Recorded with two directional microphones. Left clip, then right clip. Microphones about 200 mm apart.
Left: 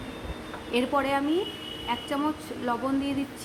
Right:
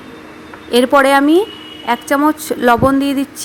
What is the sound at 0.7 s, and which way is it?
A woman's voice, 40° right (ahead or behind).